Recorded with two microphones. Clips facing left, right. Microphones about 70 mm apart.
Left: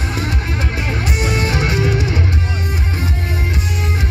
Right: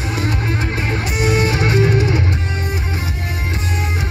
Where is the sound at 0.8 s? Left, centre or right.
Right.